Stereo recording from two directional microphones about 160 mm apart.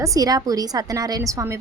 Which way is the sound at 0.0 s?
20° right (ahead or behind).